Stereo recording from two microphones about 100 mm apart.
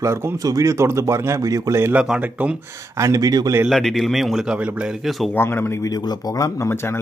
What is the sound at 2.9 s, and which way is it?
Speech, 35° right (ahead or behind).